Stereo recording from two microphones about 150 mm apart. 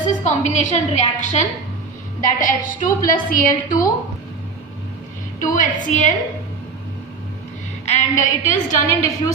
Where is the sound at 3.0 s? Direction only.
65° left (ahead or behind).